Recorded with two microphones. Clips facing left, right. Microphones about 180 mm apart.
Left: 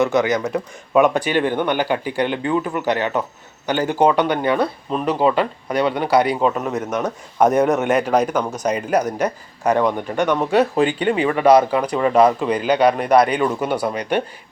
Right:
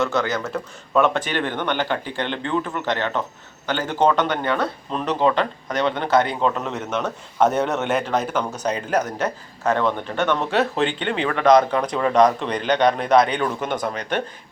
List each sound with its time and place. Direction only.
0.0 s speech: 15° left (ahead or behind)